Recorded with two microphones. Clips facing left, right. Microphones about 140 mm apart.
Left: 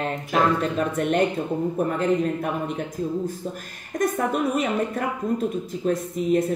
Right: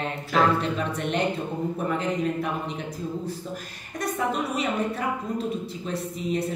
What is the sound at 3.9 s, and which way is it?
Speech, 50° left (ahead or behind).